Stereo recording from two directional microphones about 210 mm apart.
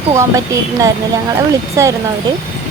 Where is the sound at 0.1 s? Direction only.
15° right (ahead or behind).